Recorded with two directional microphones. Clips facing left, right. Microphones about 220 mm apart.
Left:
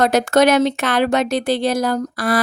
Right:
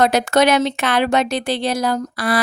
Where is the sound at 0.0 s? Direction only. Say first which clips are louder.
Left 1 dB; 45° left (ahead or behind).